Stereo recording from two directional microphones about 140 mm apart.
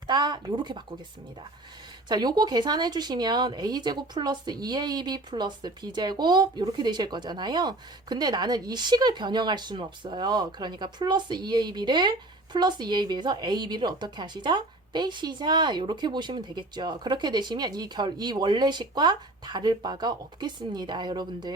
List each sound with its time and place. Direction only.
0.1 s speech: 30° right (ahead or behind)
2.0 s speech: 30° right (ahead or behind)